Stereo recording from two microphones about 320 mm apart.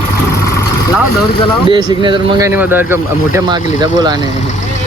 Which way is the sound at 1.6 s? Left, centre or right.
Centre.